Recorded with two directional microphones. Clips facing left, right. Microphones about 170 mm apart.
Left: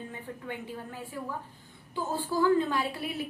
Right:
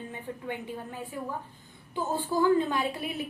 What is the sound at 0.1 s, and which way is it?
A woman's voice, 20° right (ahead or behind).